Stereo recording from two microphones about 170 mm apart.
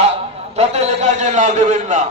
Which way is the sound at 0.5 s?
40° right (ahead or behind).